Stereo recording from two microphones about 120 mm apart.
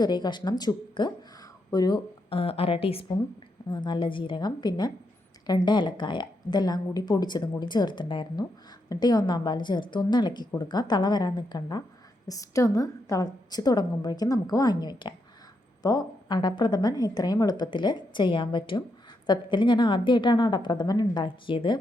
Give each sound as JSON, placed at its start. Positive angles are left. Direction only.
{"t": 0.0, "sound": "a woman's voice", "side_deg": 35}
{"t": 2.3, "sound": "a woman's voice", "side_deg": 50}
{"t": 3.7, "sound": "a woman's voice", "side_deg": 40}